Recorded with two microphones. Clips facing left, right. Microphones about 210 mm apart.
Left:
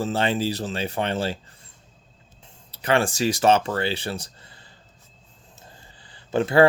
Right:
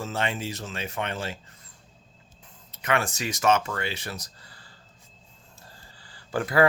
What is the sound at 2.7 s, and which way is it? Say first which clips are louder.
Speech: left 5 dB; 30° left (ahead or behind).